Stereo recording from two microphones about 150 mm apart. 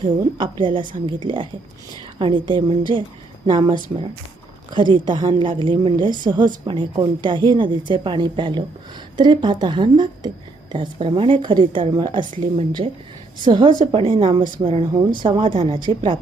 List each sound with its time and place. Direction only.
0.6 s a woman's voice: 35° right (ahead or behind)